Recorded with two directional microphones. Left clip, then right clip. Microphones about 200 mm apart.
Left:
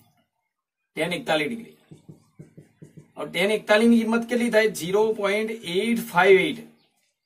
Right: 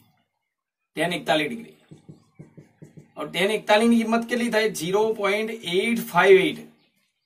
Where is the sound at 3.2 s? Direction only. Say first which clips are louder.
Even; 20° right (ahead or behind).